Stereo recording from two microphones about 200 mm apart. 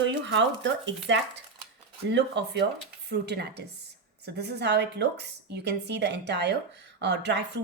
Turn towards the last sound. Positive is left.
turn(degrees=-60)  # may be behind; listen again after turning